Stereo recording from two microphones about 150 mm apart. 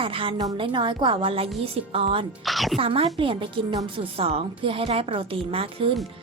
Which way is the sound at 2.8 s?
40° right (ahead or behind).